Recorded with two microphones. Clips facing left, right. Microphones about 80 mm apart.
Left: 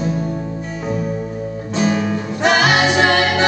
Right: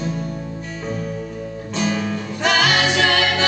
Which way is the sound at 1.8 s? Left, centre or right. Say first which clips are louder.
Left 4 dB; left.